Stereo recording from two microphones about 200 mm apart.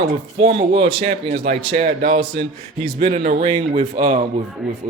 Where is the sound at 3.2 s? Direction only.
40° right (ahead or behind).